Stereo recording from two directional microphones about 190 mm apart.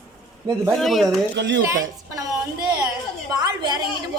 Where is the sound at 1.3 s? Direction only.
70° right (ahead or behind).